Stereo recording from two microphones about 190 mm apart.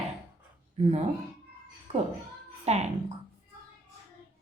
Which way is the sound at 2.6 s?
35° right (ahead or behind).